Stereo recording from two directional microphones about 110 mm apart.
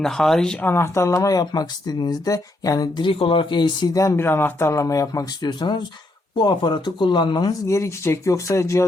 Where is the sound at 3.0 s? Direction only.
55° left (ahead or behind).